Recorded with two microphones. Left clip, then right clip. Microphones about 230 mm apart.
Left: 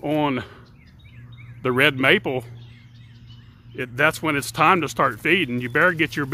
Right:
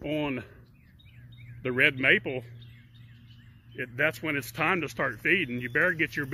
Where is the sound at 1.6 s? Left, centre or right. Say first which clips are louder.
Left 6 dB; centre.